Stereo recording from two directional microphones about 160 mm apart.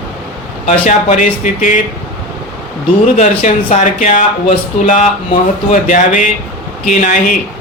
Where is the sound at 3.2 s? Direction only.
50° left (ahead or behind).